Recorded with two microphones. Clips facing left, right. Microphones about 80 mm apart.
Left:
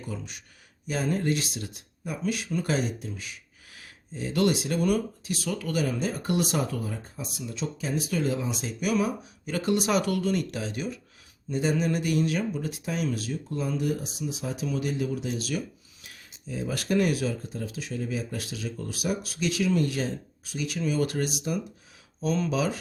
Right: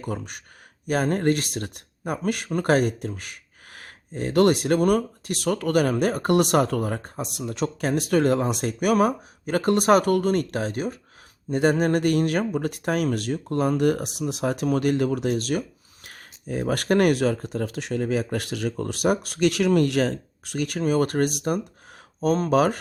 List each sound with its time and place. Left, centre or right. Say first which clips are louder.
0.0 s speech: right 6 dB; right